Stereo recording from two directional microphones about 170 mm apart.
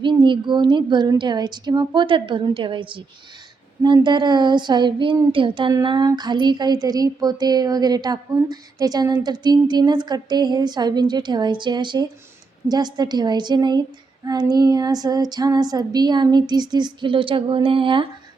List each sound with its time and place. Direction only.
0.0 s speech: 30° right (ahead or behind)